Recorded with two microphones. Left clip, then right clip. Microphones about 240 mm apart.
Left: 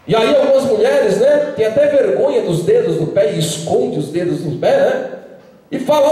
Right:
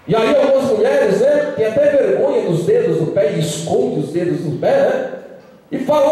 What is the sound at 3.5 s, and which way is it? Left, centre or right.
Speech, right.